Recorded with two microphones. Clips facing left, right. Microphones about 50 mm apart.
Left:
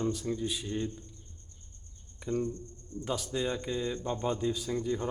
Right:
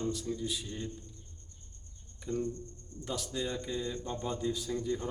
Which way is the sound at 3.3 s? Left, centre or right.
Left.